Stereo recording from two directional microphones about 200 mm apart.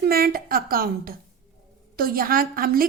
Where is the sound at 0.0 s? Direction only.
50° right (ahead or behind).